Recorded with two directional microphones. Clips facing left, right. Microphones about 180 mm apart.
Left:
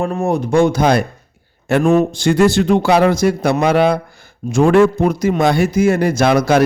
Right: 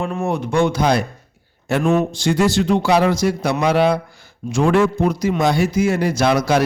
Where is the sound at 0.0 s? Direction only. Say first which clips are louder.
Left 4 dB; 40° left (ahead or behind).